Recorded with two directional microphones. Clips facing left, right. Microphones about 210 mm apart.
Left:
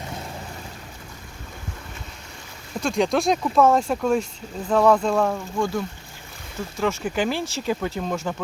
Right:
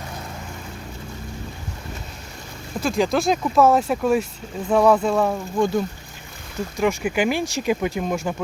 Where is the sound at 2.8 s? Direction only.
5° right (ahead or behind).